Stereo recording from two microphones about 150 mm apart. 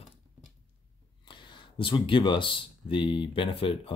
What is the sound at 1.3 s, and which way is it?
Speech, 30° left (ahead or behind).